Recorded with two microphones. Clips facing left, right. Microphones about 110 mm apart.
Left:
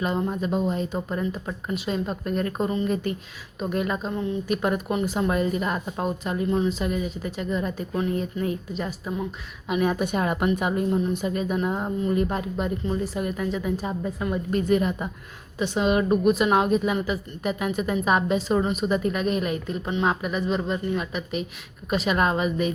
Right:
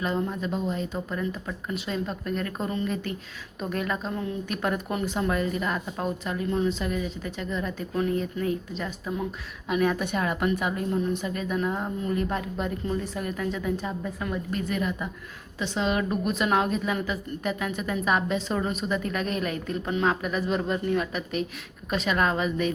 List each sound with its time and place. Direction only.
0.0 s a woman's voice: 20° left (ahead or behind)
4.0 s a woman's voice: 10° left (ahead or behind)
8.2 s a woman's voice: 25° left (ahead or behind)
9.6 s a woman's voice: 15° left (ahead or behind)
15.5 s a woman's voice: 15° left (ahead or behind)
20.3 s a woman's voice: centre (ahead or behind)